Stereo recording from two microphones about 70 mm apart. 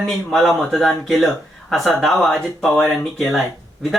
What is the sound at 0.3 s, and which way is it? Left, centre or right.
A man's voice, centre.